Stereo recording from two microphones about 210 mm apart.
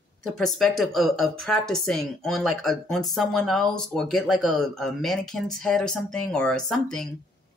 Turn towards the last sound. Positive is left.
turn(degrees=5)  # may be behind; listen again after turning